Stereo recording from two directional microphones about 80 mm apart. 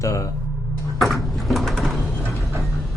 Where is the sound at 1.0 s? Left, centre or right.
Centre.